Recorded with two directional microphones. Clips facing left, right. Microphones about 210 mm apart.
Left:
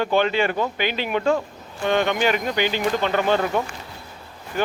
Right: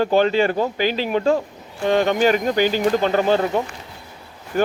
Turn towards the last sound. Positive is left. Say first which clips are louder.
# right 5 dB
turn(degrees=-45)  # may be behind; listen again after turning